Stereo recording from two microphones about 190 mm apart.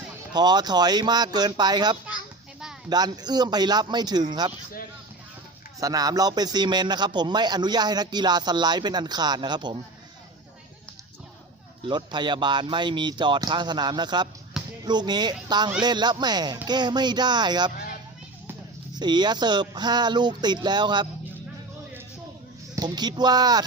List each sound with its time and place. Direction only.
0.3 s a man's voice: 20° right (ahead or behind)
5.8 s a man's voice: 20° right (ahead or behind)
11.9 s a man's voice: 25° right (ahead or behind)
18.9 s a man's voice: 20° right (ahead or behind)
22.7 s a man's voice: 20° right (ahead or behind)